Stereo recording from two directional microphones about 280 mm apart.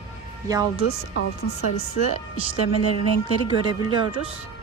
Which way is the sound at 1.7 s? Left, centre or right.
Left.